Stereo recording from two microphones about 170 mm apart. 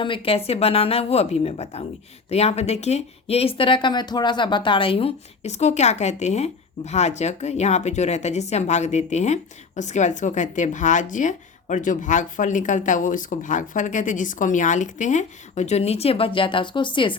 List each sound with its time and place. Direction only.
0.0 s speech: 30° left (ahead or behind)